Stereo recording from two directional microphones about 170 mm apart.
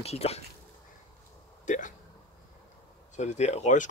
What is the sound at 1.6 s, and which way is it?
Speech, 45° left (ahead or behind).